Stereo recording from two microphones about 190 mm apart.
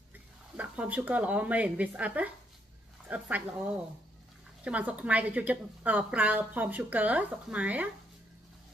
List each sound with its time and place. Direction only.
0.6 s a woman's voice: 10° right (ahead or behind)